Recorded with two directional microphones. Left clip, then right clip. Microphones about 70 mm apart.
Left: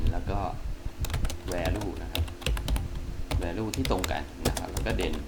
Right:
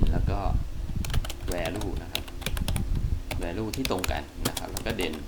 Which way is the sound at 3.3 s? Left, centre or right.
Centre.